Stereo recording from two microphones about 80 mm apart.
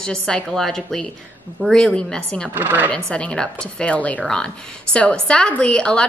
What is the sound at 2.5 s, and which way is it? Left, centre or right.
Speech, right.